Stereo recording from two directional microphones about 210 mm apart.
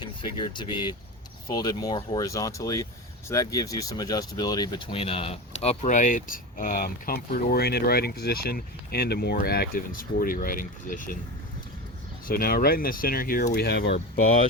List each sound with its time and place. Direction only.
0.0 s speech: 20° left (ahead or behind); by 11.2 s 40° left (ahead or behind)
12.2 s speech: 45° left (ahead or behind)